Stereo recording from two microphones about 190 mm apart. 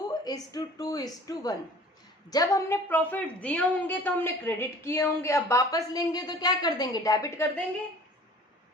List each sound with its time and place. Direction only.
0.1 s a woman's voice: 20° left (ahead or behind)